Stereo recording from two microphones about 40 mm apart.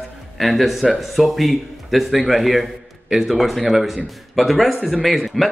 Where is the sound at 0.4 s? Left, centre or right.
Centre.